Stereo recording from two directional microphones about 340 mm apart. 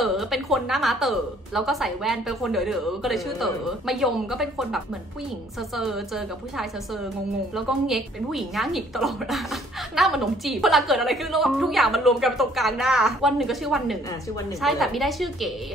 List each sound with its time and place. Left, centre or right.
0.0 s a woman's voice: centre